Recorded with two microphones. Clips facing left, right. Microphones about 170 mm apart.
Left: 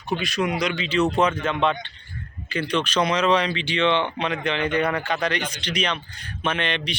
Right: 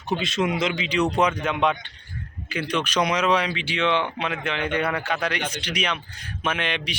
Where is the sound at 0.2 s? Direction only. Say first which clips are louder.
Right 1 dB; 25° right (ahead or behind).